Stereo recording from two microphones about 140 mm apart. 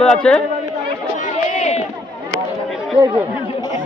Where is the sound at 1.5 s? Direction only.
55° left (ahead or behind).